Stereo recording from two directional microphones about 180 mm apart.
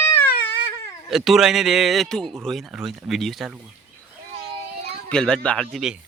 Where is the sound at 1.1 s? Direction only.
Centre (ahead or behind).